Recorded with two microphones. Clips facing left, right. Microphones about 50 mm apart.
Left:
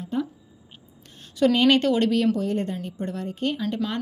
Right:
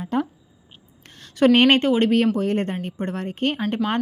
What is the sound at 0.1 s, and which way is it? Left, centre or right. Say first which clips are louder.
Speech: right 4 dB; right.